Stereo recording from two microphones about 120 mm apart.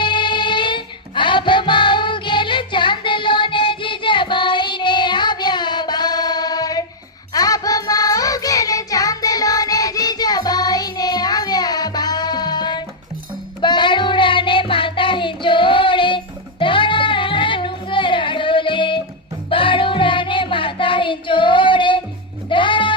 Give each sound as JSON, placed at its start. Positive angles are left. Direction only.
{"t": 0.0, "sound": "music", "side_deg": 40}
{"t": 13.6, "sound": "child singing", "side_deg": 40}
{"t": 19.5, "sound": "music", "side_deg": 45}